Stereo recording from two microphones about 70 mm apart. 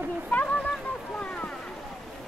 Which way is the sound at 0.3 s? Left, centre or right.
Centre.